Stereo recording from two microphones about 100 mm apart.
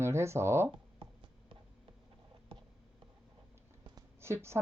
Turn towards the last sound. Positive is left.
turn(degrees=-25)  # may be behind; listen again after turning